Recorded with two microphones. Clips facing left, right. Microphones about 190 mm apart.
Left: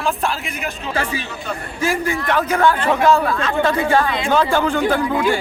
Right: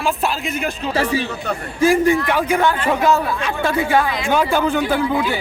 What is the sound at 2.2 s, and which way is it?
A man's voice, 10° right (ahead or behind).